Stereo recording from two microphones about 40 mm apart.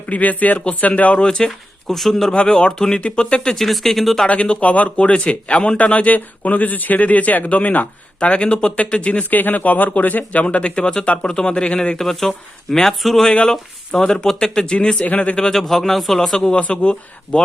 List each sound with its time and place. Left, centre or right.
0.1 s speech: left; by 2.3 s centre
2.3 s speech: left
3.2 s speech: left
3.4 s speech: centre
4.3 s speech: left
9.3 s speech: left
10.4 s speech: left
11.9 s speech: centre
13.5 s speech: centre
15.0 s speech: left
15.5 s speech: centre
16.4 s speech: left